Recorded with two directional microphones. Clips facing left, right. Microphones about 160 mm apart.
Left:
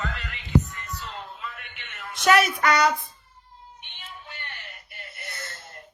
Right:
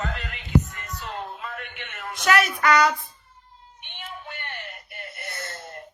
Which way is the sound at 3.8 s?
55° right (ahead or behind).